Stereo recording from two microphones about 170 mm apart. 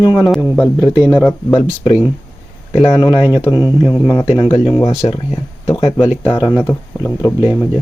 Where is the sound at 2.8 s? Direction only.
30° left (ahead or behind).